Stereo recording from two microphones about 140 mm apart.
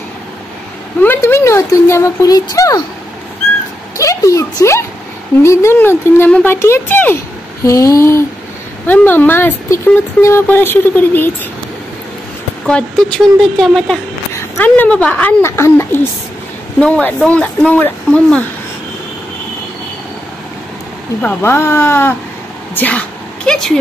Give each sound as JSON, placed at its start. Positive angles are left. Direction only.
{"t": 1.0, "sound": "speech", "side_deg": 15}
{"t": 3.9, "sound": "speech", "side_deg": 25}
{"t": 12.6, "sound": "speech", "side_deg": 5}
{"t": 16.8, "sound": "speech", "side_deg": 10}
{"t": 21.2, "sound": "speech", "side_deg": 15}